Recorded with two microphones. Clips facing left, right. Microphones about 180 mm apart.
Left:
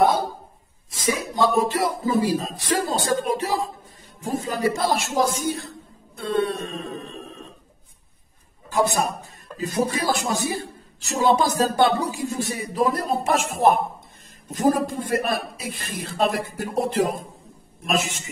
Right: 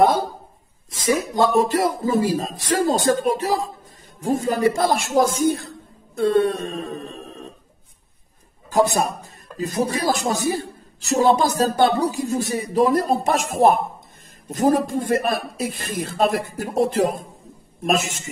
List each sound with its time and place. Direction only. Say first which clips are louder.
1.1 s speech: right 4 dB; 45° right (ahead or behind)
8.6 s a man's voice: right 3 dB; 40° right (ahead or behind)